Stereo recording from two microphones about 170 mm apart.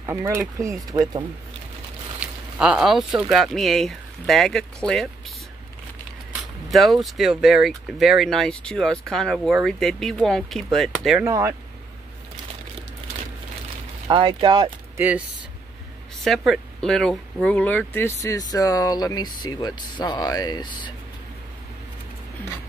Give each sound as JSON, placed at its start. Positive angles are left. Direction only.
{"t": 0.0, "sound": "speech", "side_deg": -20}
{"t": 2.1, "sound": "speech", "side_deg": -5}
{"t": 6.7, "sound": "speech", "side_deg": 0}
{"t": 11.1, "sound": "speech", "side_deg": -15}
{"t": 14.0, "sound": "speech", "side_deg": -30}
{"t": 15.0, "sound": "speech", "side_deg": -10}
{"t": 16.3, "sound": "speech", "side_deg": 0}